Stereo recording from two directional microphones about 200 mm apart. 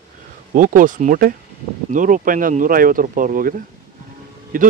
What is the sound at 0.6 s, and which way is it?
Speech, 40° right (ahead or behind).